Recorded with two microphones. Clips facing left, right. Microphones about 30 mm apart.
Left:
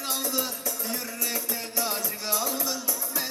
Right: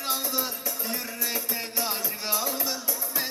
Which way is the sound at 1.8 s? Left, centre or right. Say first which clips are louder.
Left 2 dB; right.